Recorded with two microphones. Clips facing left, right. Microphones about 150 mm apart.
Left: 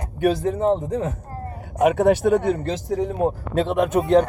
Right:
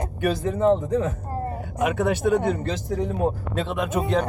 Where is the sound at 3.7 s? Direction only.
50° left (ahead or behind).